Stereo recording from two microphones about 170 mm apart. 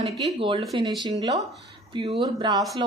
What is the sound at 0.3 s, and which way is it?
Speech, 30° right (ahead or behind).